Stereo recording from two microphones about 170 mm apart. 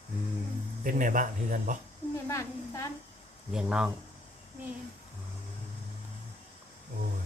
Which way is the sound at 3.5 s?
5° right (ahead or behind).